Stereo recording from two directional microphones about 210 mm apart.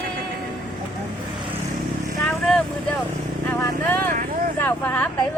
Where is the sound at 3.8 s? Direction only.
10° left (ahead or behind).